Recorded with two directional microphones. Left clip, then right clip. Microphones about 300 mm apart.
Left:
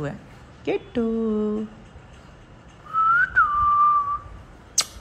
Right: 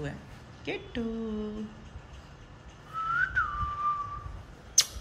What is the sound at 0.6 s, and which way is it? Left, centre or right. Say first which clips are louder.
Music: left 10 dB; centre.